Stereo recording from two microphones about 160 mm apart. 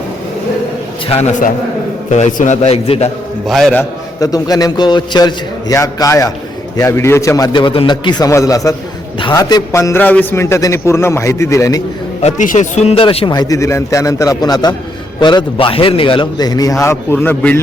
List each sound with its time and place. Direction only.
1.1 s a man's voice: 45° left (ahead or behind)
3.4 s a man's voice: centre (ahead or behind)
4.2 s a man's voice: 25° left (ahead or behind)
12.2 s a man's voice: 50° left (ahead or behind); by 17.6 s 10° left (ahead or behind)